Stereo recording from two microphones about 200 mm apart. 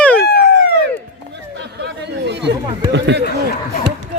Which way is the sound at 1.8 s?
60° right (ahead or behind).